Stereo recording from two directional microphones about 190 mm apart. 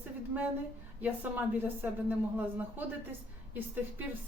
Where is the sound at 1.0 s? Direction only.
10° right (ahead or behind).